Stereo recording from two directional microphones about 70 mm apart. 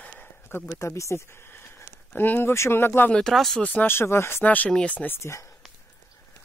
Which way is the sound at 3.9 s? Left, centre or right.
Left.